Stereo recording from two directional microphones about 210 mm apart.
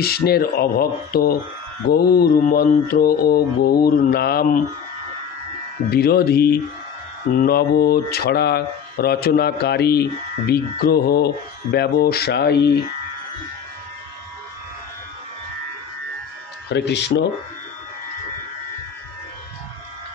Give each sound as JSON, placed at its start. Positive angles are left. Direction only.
{"t": 0.0, "sound": "speech", "side_deg": 50}
{"t": 5.9, "sound": "speech", "side_deg": 50}
{"t": 16.6, "sound": "speech", "side_deg": 55}